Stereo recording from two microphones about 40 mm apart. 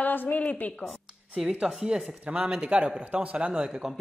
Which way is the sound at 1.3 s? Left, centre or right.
Centre.